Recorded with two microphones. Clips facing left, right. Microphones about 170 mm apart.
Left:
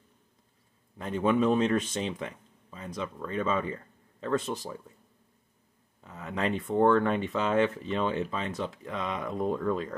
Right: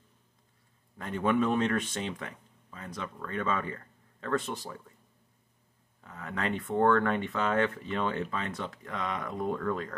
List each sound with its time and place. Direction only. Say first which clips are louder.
0.9 s speech: left 2 dB; 20° left (ahead or behind)
5.9 s speech: left 3 dB; 15° left (ahead or behind)